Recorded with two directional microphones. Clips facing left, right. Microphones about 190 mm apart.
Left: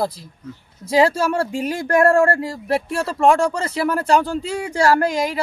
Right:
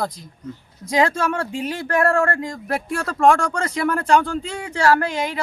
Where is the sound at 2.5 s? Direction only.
Centre (ahead or behind).